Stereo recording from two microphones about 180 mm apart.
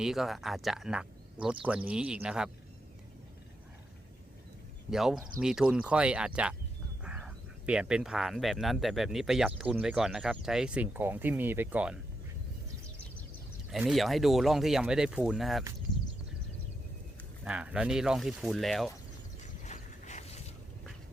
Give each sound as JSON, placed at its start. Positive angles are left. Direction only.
{"t": 0.0, "sound": "speech", "side_deg": 0}
{"t": 4.9, "sound": "speech", "side_deg": 0}
{"t": 13.7, "sound": "speech", "side_deg": 0}
{"t": 17.4, "sound": "speech", "side_deg": -5}
{"t": 19.6, "sound": "a sound", "side_deg": 40}